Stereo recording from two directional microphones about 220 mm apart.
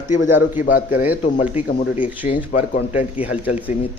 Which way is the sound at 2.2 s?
35° left (ahead or behind).